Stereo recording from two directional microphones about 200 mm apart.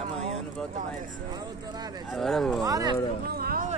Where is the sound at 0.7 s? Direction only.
40° right (ahead or behind).